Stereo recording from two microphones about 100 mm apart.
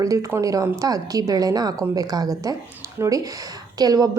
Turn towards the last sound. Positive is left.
turn(degrees=-40)  # may be behind; listen again after turning